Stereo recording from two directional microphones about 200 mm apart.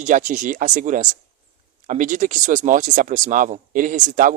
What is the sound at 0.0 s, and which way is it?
Speech, 40° right (ahead or behind).